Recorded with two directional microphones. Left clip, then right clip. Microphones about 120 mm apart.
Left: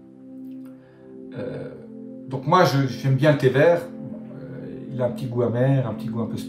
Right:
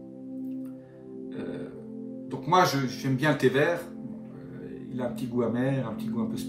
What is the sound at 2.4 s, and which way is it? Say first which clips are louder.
A man's voice: left 5 dB; 15° left (ahead or behind).